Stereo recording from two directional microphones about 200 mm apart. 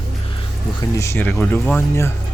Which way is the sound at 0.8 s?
15° left (ahead or behind).